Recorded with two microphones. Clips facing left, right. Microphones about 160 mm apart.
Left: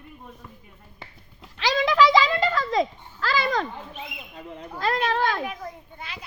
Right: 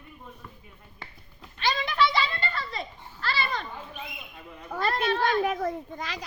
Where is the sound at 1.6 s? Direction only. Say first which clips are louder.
Left 6 dB; 90° left.